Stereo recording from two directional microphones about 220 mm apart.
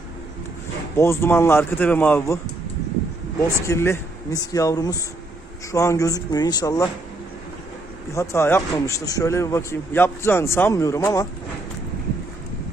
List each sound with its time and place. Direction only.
0.9 s a man's voice: 10° left (ahead or behind)
3.7 s a man's voice: 10° left (ahead or behind)
8.1 s a man's voice: 10° left (ahead or behind)